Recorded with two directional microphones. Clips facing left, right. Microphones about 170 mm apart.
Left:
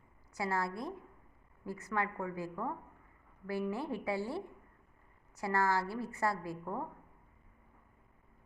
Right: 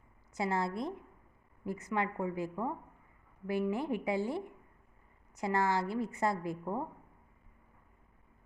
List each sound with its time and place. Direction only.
0.3 s a woman's voice: 20° right (ahead or behind)